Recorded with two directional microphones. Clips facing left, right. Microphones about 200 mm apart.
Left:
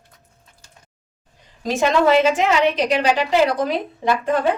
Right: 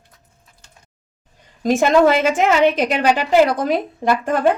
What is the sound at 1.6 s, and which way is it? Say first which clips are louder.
A woman's voice: right 4 dB; 50° right (ahead or behind).